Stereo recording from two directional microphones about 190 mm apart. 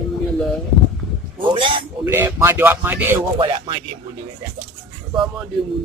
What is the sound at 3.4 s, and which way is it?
Music, 25° right (ahead or behind).